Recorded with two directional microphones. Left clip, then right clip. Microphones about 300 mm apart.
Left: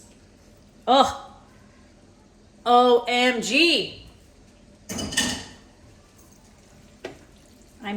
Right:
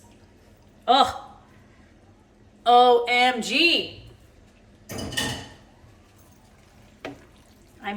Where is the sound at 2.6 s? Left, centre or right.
Centre.